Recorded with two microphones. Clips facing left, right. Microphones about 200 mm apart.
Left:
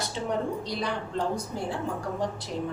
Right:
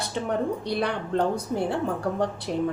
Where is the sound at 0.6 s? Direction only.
60° right (ahead or behind).